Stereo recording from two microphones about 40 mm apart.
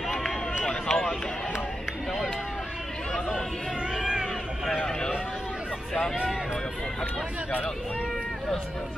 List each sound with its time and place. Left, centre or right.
0.7 s run: centre
3.9 s cat: centre